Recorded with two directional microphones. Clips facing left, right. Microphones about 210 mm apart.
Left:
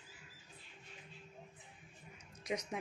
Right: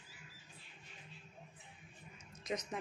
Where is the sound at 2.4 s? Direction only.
15° left (ahead or behind).